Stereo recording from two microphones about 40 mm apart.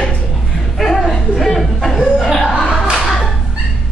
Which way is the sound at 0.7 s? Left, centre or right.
Centre.